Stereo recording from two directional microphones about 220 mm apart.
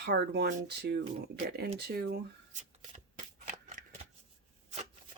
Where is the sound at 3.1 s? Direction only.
30° right (ahead or behind).